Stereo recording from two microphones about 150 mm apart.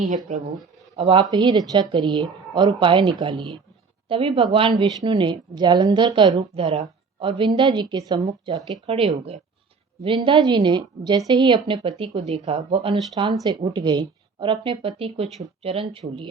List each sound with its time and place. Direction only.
0.9 s a woman's voice: 35° right (ahead or behind)